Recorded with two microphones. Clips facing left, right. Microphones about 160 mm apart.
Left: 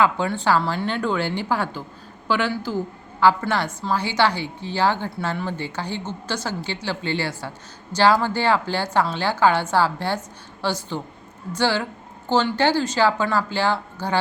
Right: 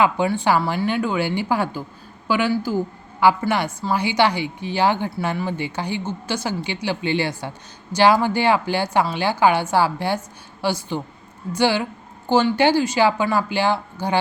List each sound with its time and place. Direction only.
0.0 s a woman's voice: 15° right (ahead or behind)